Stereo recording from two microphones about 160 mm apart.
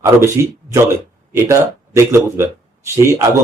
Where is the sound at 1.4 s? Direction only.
15° right (ahead or behind).